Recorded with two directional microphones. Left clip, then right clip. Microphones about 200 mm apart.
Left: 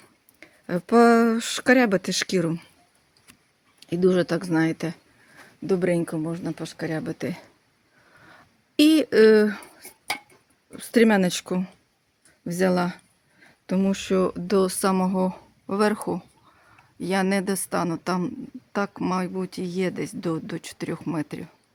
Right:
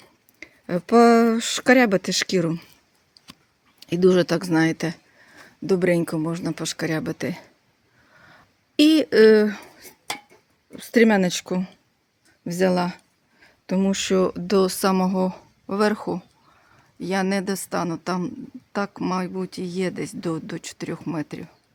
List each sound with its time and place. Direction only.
0.3 s speech: 10° right (ahead or behind)
3.8 s speech: 20° right (ahead or behind)
8.3 s dishes: 10° right (ahead or behind)
10.7 s a woman's voice: 5° right (ahead or behind)